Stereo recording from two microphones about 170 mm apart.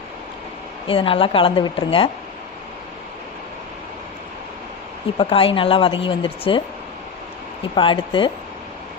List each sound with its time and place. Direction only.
0.9 s a woman's voice: 30° left (ahead or behind)
5.1 s a woman's voice: 35° left (ahead or behind)
7.8 s speech: 30° left (ahead or behind)